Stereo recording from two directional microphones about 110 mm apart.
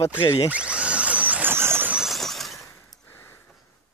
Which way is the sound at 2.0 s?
Centre (ahead or behind).